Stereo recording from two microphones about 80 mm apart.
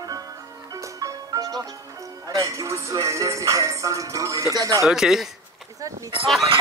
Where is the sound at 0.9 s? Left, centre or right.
Right.